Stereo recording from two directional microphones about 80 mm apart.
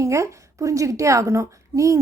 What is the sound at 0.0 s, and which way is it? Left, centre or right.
A woman's voice, right.